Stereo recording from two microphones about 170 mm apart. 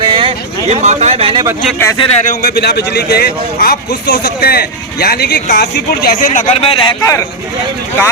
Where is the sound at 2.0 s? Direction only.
40° left (ahead or behind).